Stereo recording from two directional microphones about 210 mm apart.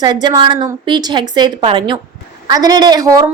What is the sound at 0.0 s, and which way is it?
A woman's voice, 20° right (ahead or behind).